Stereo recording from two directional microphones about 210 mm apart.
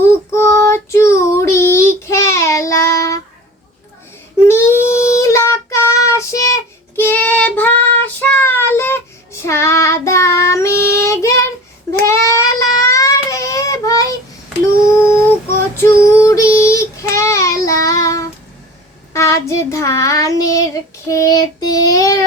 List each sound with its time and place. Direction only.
0.0 s child singing: 15° left (ahead or behind)
4.4 s child singing: 10° left (ahead or behind)
16.1 s child singing: 15° left (ahead or behind)